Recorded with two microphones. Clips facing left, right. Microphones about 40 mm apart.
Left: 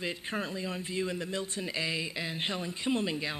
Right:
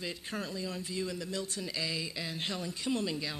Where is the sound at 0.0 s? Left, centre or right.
Left.